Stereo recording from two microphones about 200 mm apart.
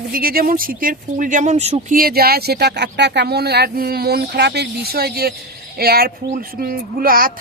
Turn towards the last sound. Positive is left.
turn(degrees=-45)  # may be behind; listen again after turning